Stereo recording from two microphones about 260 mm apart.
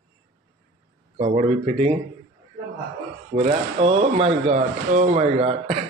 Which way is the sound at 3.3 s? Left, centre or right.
Right.